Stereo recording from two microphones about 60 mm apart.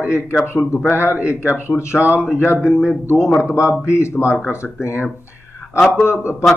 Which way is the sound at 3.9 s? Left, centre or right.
Left.